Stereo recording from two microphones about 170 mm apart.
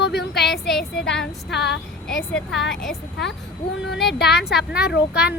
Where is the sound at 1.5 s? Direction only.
75° left (ahead or behind).